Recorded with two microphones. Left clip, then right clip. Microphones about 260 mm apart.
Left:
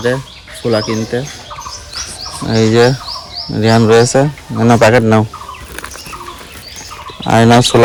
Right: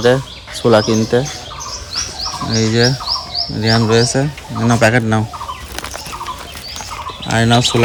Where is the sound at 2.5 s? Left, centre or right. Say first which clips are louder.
Left 6 dB; centre.